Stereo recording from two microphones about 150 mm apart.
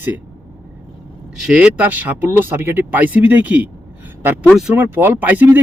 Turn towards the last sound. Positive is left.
turn(degrees=-10)  # may be behind; listen again after turning